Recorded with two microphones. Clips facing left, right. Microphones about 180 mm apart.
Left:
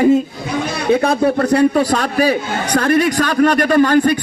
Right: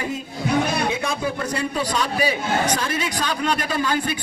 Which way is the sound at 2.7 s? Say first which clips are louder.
Left 10 dB; 65° left (ahead or behind).